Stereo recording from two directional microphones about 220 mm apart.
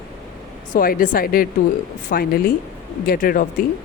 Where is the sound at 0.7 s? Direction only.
40° left (ahead or behind).